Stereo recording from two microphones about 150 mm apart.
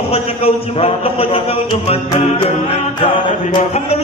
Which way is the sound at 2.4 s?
35° left (ahead or behind).